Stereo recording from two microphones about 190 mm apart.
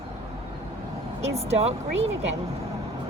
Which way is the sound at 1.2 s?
35° right (ahead or behind).